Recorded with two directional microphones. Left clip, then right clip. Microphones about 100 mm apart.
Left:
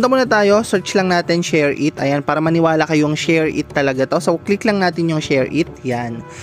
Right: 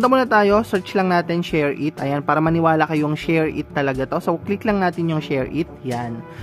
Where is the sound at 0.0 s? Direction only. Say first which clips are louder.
Left 2 dB; 35° left (ahead or behind).